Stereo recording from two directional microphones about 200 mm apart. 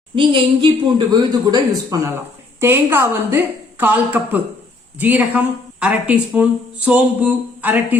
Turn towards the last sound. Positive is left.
turn(degrees=-10)  # may be behind; listen again after turning